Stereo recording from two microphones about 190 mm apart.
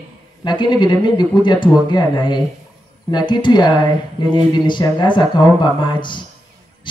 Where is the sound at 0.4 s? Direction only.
25° left (ahead or behind).